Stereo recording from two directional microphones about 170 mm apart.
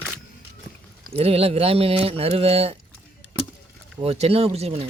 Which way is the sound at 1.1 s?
35° right (ahead or behind).